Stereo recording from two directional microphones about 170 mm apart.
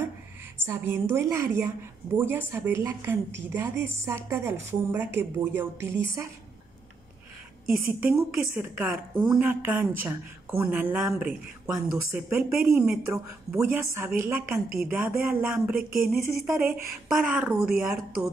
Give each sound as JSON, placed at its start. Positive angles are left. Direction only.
{"t": 0.7, "sound": "a woman's voice", "side_deg": -15}
{"t": 7.7, "sound": "a woman's voice", "side_deg": -5}